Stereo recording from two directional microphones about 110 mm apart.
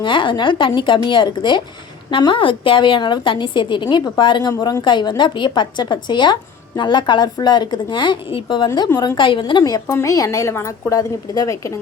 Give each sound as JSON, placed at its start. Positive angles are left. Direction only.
{"t": 0.0, "sound": "a woman's voice", "side_deg": 45}
{"t": 9.8, "sound": "a woman's voice", "side_deg": 25}